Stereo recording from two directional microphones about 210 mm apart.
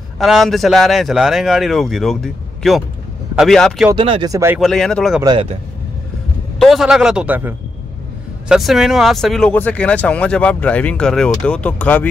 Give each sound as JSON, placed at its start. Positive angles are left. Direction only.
{"t": 0.2, "sound": "speech", "side_deg": 0}
{"t": 3.9, "sound": "speech", "side_deg": -25}
{"t": 4.6, "sound": "speech", "side_deg": 0}
{"t": 5.2, "sound": "speech", "side_deg": -25}
{"t": 6.6, "sound": "speech", "side_deg": 0}